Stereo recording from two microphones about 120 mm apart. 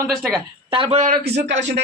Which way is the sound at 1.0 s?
70° right (ahead or behind).